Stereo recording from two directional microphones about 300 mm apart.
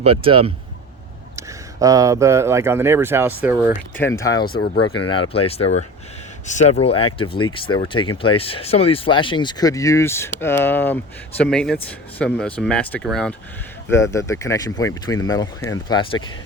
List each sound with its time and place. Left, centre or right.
0.0 s speech: centre
3.9 s speech: centre
4.4 s speech: left
4.8 s speech: centre